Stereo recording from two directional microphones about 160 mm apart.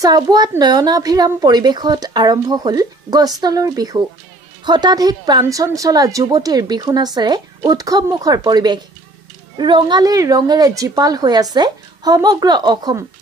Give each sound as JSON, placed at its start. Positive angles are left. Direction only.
{"t": 0.0, "sound": "a woman's voice", "side_deg": -25}